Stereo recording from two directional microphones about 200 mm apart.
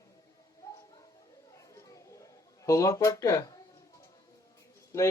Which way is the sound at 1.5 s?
15° left (ahead or behind).